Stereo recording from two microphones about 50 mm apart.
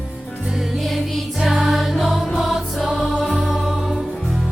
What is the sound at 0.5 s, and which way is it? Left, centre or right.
Music, centre.